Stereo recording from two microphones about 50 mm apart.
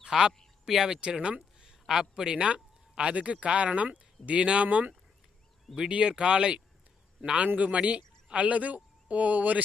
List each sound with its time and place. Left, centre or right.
0.0 s speech: centre
1.0 s a man's voice: centre